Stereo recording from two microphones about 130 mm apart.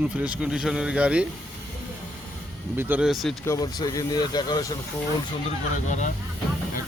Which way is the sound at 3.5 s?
30° left (ahead or behind).